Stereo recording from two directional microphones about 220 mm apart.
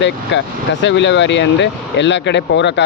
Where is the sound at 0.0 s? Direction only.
55° left (ahead or behind).